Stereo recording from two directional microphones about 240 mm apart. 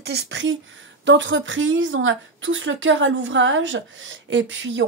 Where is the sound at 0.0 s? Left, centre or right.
Right.